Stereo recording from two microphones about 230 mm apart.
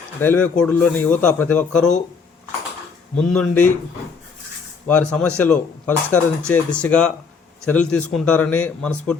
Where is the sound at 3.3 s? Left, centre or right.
Centre.